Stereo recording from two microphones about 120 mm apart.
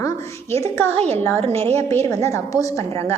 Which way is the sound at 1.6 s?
20° left (ahead or behind).